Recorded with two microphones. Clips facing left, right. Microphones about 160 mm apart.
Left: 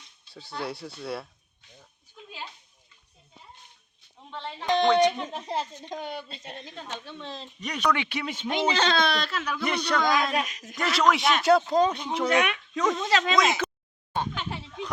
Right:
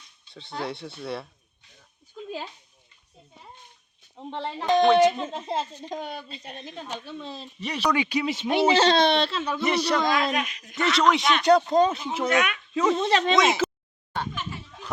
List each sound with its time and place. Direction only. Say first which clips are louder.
0.6 s speech: right 1 dB; centre (ahead or behind)
4.4 s speech: right 5 dB; 45° right (ahead or behind)
4.9 s speech: right 3 dB; 5° right (ahead or behind)
5.1 s speech: right 2 dB; 20° right (ahead or behind)
8.4 s speech: right 5 dB; 35° right (ahead or behind)
9.6 s speech: right 4 dB; 5° right (ahead or behind)
10.0 s speech: right 1 dB; 25° right (ahead or behind)
10.3 s speech: even; 35° left (ahead or behind)
10.8 s speech: right 2 dB; centre (ahead or behind)
13.0 s speech: right 3 dB; 30° right (ahead or behind)
13.3 s speech: right 3 dB; centre (ahead or behind)
14.3 s a sound: left 2 dB; 70° left (ahead or behind)